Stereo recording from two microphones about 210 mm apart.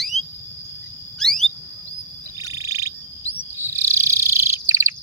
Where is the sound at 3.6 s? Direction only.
15° right (ahead or behind).